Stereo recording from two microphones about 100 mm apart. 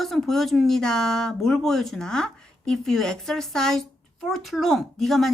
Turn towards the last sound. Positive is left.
turn(degrees=0)  # may be behind; listen again after turning